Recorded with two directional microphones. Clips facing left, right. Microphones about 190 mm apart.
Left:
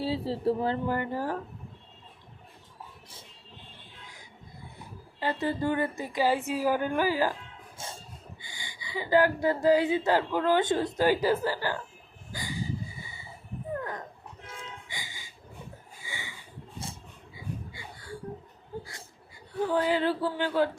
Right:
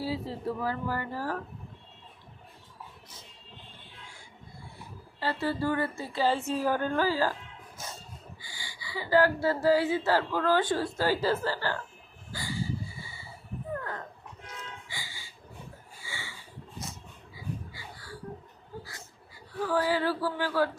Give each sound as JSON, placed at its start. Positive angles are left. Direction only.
{"t": 0.0, "sound": "speech", "side_deg": 30}
{"t": 5.2, "sound": "speech", "side_deg": 20}
{"t": 7.8, "sound": "dog", "side_deg": 30}
{"t": 8.4, "sound": "speech", "side_deg": 20}
{"t": 12.3, "sound": "a sound", "side_deg": 20}
{"t": 13.7, "sound": "dog", "side_deg": 15}
{"t": 14.4, "sound": "music", "side_deg": 25}
{"t": 16.0, "sound": "a sound", "side_deg": 20}
{"t": 16.8, "sound": "wheeze", "side_deg": 25}
{"t": 19.5, "sound": "speech", "side_deg": 20}